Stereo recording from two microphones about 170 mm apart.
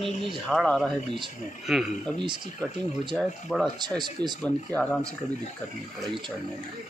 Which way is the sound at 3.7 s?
25° right (ahead or behind).